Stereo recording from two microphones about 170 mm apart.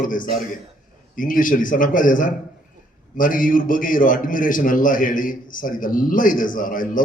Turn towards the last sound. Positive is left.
turn(degrees=50)  # may be behind; listen again after turning